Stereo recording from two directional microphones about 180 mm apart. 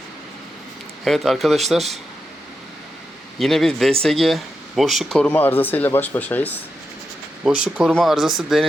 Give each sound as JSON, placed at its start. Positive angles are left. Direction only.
{"t": 1.0, "sound": "speech", "side_deg": 0}
{"t": 3.3, "sound": "speech", "side_deg": 0}
{"t": 7.4, "sound": "speech", "side_deg": -5}